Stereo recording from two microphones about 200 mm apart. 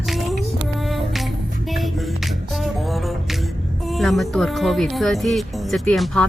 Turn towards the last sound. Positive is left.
turn(degrees=5)  # may be behind; listen again after turning